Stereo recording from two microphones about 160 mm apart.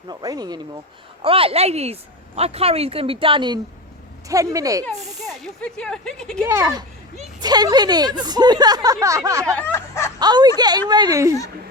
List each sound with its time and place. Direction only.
0.1 s speech: 25° right (ahead or behind)
1.2 s a woman's voice: 35° right (ahead or behind)
5.2 s speech: 5° left (ahead or behind)
6.4 s speech: 15° right (ahead or behind)
9.6 s snicker: 15° left (ahead or behind)
10.2 s speech: 25° right (ahead or behind)